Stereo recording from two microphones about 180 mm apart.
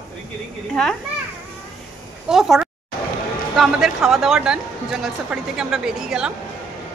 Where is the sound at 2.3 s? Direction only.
5° right (ahead or behind).